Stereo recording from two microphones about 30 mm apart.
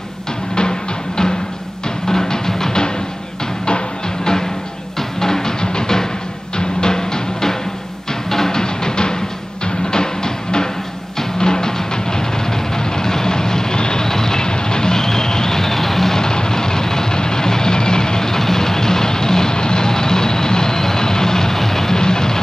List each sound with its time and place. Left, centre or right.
0.6 s music: left
12.7 s vehicle: centre
14.0 s music: centre
16.2 s vehicle: left